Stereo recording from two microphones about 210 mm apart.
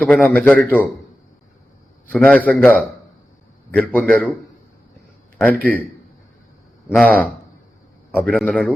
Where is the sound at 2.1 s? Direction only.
5° left (ahead or behind).